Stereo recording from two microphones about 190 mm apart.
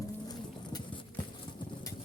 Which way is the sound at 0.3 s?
20° left (ahead or behind).